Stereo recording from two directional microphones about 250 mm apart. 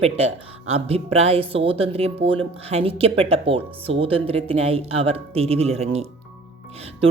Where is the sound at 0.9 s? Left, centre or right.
Right.